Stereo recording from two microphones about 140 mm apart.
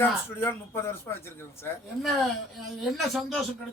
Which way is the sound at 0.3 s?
15° left (ahead or behind).